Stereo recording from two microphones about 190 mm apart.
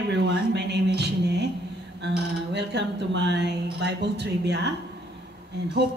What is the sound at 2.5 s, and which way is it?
Speech, 65° right (ahead or behind).